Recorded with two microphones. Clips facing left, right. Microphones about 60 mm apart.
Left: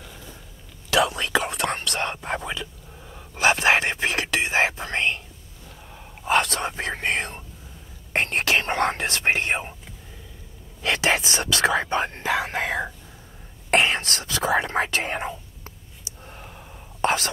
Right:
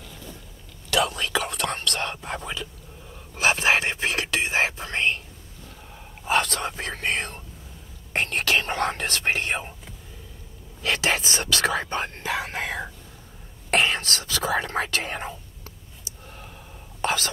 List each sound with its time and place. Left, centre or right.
0.9 s speech: left
2.4 s a sound: centre
3.3 s speech: left
6.3 s whispering: left
6.8 s speech: left
10.8 s speech: left
16.3 s gasp: left
17.0 s whispering: left